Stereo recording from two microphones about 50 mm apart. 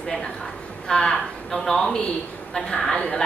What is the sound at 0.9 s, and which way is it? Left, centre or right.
A woman's voice, centre.